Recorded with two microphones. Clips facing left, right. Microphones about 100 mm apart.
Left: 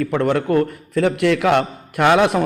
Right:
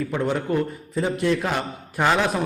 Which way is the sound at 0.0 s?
65° left (ahead or behind).